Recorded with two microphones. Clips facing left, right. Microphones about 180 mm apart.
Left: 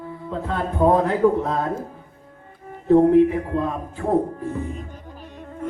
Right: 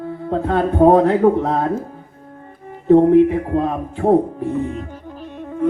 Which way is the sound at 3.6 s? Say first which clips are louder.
Right 7 dB; 70° right (ahead or behind).